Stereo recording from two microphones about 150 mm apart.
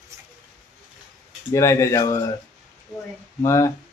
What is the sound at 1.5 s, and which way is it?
Speech, 20° left (ahead or behind).